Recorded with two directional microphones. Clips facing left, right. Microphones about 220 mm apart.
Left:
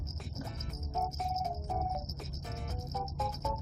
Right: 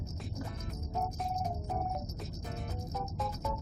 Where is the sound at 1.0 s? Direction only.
5° left (ahead or behind).